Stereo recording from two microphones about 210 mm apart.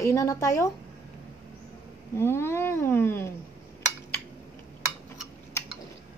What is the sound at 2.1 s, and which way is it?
A woman's voice, 10° left (ahead or behind).